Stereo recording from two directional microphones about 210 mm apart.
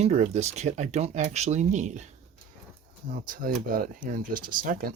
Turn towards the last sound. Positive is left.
turn(degrees=-40)  # may be behind; listen again after turning